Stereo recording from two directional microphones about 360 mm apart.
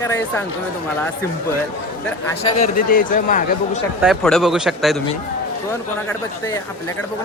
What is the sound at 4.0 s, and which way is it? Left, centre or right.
Speech, centre.